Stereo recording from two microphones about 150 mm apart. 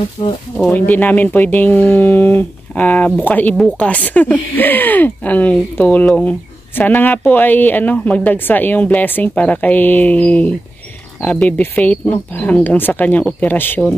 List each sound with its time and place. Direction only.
0.2 s speech: 25° left (ahead or behind)
0.6 s speech: 10° left (ahead or behind)